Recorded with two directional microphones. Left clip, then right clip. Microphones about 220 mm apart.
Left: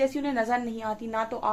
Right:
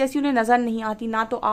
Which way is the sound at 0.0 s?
45° right (ahead or behind).